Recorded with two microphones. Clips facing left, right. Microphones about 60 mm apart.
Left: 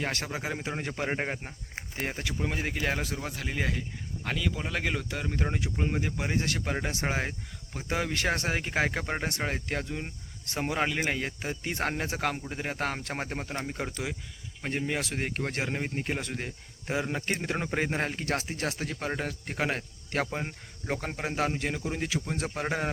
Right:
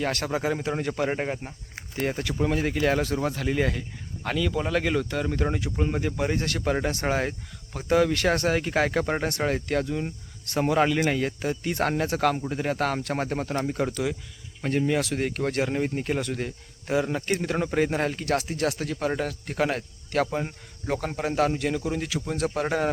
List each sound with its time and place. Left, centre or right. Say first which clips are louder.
0.0 s speech: right 6 dB; centre
13.2 s speech: right 7 dB; centre